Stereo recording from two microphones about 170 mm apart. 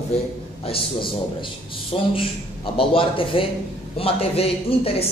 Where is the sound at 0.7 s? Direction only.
35° left (ahead or behind).